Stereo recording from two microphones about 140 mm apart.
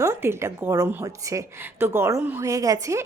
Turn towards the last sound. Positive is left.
turn(degrees=-20)  # may be behind; listen again after turning